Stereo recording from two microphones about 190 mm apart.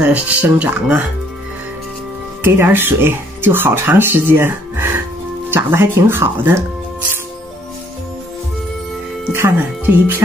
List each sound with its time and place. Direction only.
0.0 s speech: 10° right (ahead or behind)
2.4 s speech: 10° right (ahead or behind)
9.3 s speech: 10° right (ahead or behind)